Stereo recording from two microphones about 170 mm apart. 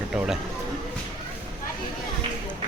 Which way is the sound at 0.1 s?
5° right (ahead or behind).